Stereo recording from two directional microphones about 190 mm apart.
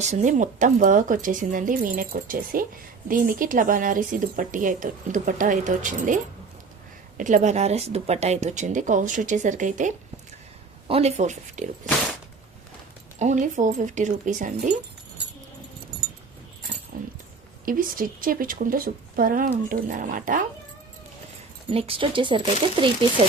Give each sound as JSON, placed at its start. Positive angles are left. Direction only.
{"t": 0.0, "sound": "speech", "side_deg": -35}
{"t": 7.2, "sound": "speech", "side_deg": -40}
{"t": 13.1, "sound": "speech", "side_deg": -40}
{"t": 16.9, "sound": "dog", "side_deg": -55}
{"t": 17.7, "sound": "speech", "side_deg": -45}
{"t": 21.7, "sound": "speech", "side_deg": -30}